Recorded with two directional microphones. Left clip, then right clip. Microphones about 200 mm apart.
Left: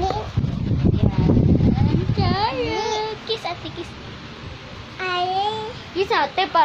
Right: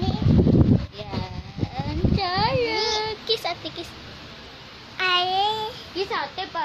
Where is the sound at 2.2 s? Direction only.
40° right (ahead or behind).